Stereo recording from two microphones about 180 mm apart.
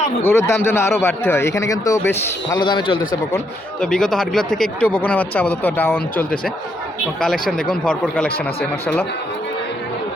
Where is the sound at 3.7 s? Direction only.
5° left (ahead or behind).